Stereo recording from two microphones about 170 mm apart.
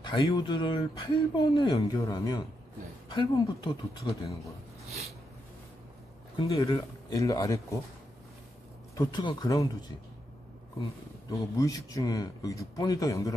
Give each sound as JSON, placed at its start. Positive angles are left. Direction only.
{"t": 0.0, "sound": "speech", "side_deg": 25}
{"t": 6.6, "sound": "speech", "side_deg": 20}
{"t": 8.9, "sound": "speech", "side_deg": 25}
{"t": 10.8, "sound": "speech", "side_deg": 20}